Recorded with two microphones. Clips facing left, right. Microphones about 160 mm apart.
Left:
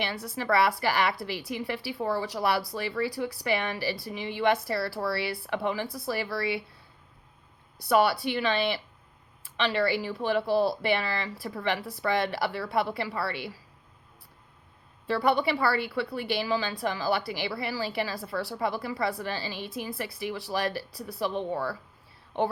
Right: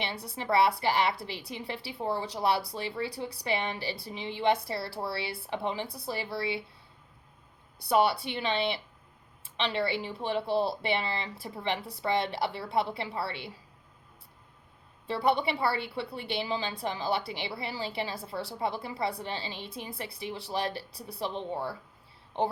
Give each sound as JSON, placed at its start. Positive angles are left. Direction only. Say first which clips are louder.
{"t": 0.0, "sound": "a woman's voice", "louder": "left 4 dB", "side_deg": -25}
{"t": 7.9, "sound": "a woman's voice", "louder": "left 2 dB", "side_deg": -25}
{"t": 15.0, "sound": "a woman's voice", "louder": "left 2 dB", "side_deg": -25}